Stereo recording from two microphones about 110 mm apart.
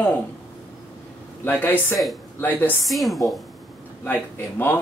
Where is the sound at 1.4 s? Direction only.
20° left (ahead or behind).